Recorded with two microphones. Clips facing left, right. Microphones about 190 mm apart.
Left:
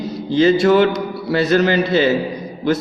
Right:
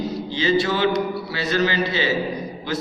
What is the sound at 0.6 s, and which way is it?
A man's voice, 55° left (ahead or behind).